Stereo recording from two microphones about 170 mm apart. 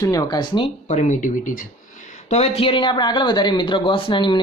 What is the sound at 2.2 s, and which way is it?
Speech, 40° left (ahead or behind).